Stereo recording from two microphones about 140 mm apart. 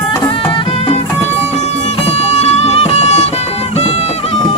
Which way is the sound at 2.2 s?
50° left (ahead or behind).